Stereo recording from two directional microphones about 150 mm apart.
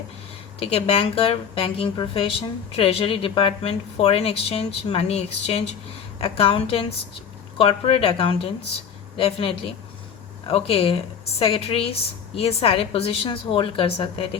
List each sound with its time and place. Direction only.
0.6 s a woman's voice: 40° left (ahead or behind)